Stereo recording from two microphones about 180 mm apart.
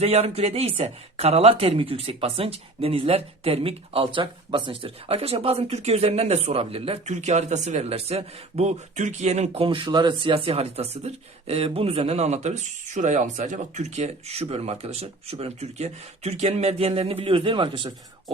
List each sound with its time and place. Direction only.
0.0 s speech: 35° right (ahead or behind)